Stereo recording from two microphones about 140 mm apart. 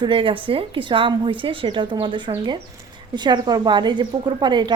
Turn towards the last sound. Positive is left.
turn(degrees=-30)  # may be behind; listen again after turning